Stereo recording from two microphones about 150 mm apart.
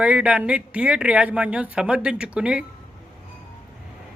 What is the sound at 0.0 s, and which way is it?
Speech, 10° right (ahead or behind).